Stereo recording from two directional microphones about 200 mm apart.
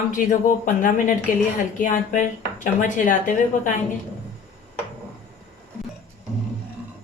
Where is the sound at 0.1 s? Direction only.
40° left (ahead or behind).